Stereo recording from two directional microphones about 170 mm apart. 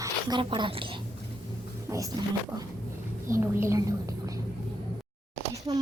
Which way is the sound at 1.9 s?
20° right (ahead or behind).